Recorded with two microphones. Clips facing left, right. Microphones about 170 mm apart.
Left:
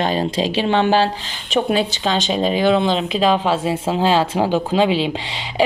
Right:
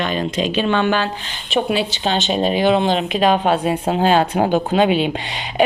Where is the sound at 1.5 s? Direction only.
40° left (ahead or behind).